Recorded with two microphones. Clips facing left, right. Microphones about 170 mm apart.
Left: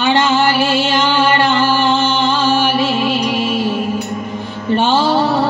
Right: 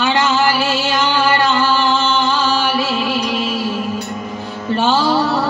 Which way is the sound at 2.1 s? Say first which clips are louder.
Left 2 dB; 25° left (ahead or behind).